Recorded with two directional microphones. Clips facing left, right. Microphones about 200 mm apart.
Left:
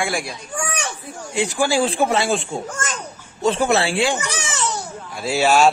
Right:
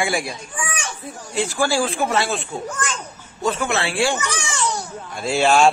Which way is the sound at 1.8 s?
30° left (ahead or behind).